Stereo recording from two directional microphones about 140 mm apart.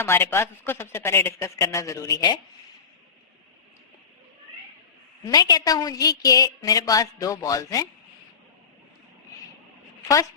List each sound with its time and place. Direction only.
0.0 s a woman's voice: 15° left (ahead or behind)
5.3 s a woman's voice: 25° left (ahead or behind)